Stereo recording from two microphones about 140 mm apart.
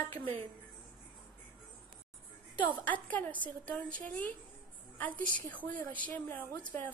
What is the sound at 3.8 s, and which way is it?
Speech, 75° right (ahead or behind).